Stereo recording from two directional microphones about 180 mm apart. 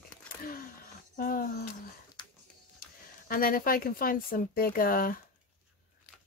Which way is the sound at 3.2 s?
55° left (ahead or behind).